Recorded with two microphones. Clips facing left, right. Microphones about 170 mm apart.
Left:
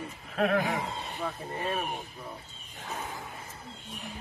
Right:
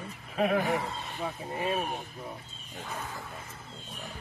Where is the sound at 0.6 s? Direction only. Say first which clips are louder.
Right 2 dB; 15° left (ahead or behind).